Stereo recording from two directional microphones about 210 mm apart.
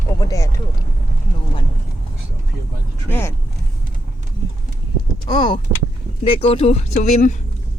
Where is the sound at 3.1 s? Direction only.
10° left (ahead or behind).